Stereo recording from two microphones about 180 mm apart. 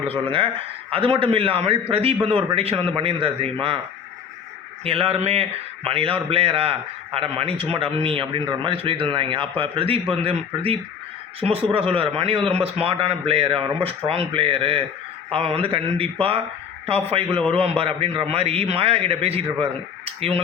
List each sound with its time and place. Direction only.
0.3 s a man's voice: 30° right (ahead or behind)
4.8 s a man's voice: 35° right (ahead or behind)